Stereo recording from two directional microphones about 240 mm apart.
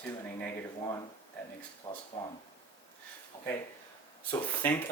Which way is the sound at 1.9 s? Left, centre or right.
Centre.